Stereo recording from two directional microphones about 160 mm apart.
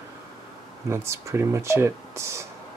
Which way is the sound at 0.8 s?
15° right (ahead or behind).